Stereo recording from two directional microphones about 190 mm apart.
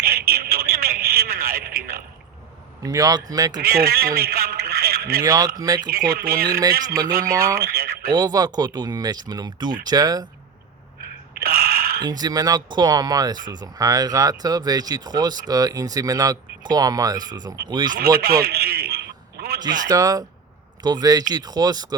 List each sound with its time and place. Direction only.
0.0 s a sound: 50° right (ahead or behind)
2.8 s speech: 20° right (ahead or behind)
3.6 s radio: 50° right (ahead or behind)
5.2 s speech: 20° right (ahead or behind)
5.9 s speech: 50° right (ahead or behind)
7.3 s speech: 15° right (ahead or behind)
7.6 s a sound: 50° right (ahead or behind)
8.1 s speech: 20° right (ahead or behind)
11.4 s a sound: 50° right (ahead or behind)
12.0 s speech: 20° right (ahead or behind)
18.2 s a sound: 55° right (ahead or behind)
19.9 s speech: 20° right (ahead or behind)